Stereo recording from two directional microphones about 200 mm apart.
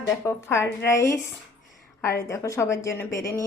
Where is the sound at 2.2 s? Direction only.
15° left (ahead or behind).